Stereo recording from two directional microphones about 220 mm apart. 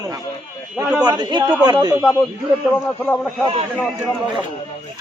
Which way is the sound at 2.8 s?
5° left (ahead or behind).